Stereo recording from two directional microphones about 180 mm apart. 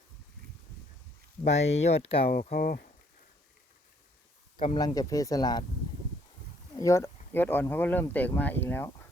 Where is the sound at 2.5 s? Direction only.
55° left (ahead or behind).